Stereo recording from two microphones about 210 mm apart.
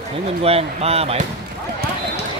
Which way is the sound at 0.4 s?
30° right (ahead or behind).